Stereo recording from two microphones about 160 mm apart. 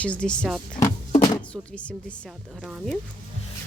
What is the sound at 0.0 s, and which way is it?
Speech, 5° left (ahead or behind).